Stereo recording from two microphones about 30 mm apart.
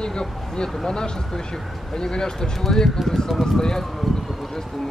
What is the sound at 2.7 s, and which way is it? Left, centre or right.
Speech, centre.